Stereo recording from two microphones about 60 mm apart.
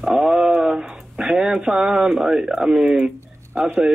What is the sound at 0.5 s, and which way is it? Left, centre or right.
Speech, right.